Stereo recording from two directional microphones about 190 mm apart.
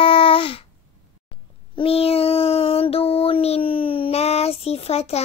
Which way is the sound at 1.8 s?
30° left (ahead or behind).